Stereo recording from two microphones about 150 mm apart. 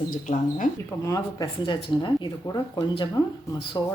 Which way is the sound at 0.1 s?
60° left (ahead or behind).